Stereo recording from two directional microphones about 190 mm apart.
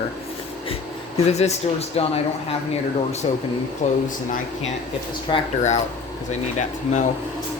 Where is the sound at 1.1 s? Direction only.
35° left (ahead or behind).